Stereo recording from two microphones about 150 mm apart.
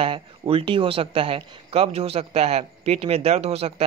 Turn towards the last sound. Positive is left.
turn(degrees=-45)  # may be behind; listen again after turning